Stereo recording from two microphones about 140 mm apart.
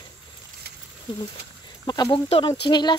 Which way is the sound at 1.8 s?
30° left (ahead or behind).